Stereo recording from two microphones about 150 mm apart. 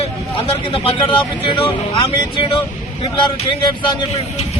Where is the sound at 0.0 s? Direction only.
40° left (ahead or behind).